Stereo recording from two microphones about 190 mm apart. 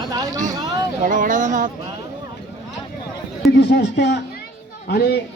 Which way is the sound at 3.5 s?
60° left (ahead or behind).